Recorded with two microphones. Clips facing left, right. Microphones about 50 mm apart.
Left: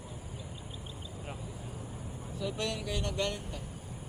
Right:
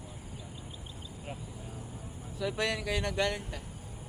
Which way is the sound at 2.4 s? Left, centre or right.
Right.